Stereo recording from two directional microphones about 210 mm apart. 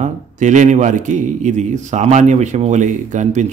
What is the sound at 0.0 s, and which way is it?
A man's voice, 35° right (ahead or behind).